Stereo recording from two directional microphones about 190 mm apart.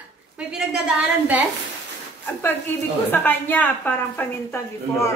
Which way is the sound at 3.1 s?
10° left (ahead or behind).